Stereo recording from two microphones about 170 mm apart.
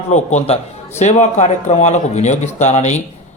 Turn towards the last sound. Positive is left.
turn(degrees=40)  # may be behind; listen again after turning